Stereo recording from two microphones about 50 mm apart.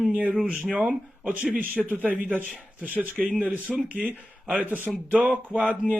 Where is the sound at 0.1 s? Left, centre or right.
Right.